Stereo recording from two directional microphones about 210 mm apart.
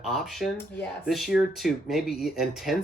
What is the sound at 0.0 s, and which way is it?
Speech, centre (ahead or behind).